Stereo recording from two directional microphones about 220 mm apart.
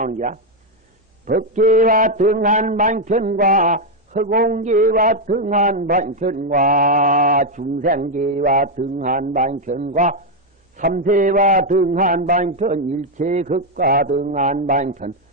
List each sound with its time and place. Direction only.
0.0 s speech: 35° right (ahead or behind)
1.5 s a man's voice: 35° right (ahead or behind)